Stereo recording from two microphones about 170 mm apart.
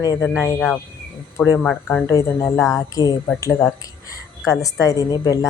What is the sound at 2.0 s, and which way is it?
A woman's voice, 15° left (ahead or behind).